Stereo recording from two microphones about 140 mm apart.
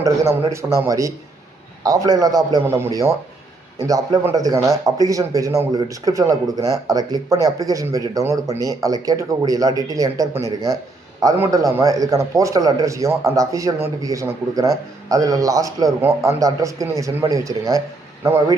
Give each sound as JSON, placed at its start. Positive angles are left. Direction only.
{"t": 0.5, "sound": "speech", "side_deg": -20}